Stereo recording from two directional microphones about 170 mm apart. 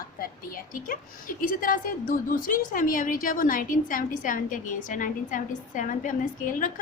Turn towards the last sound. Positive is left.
turn(degrees=50)  # may be behind; listen again after turning